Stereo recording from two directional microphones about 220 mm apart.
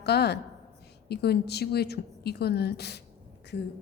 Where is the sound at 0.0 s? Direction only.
50° left (ahead or behind).